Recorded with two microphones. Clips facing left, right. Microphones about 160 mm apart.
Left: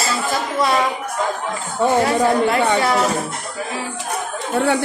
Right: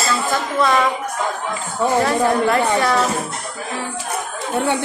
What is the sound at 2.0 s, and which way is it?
Speech, 15° left (ahead or behind).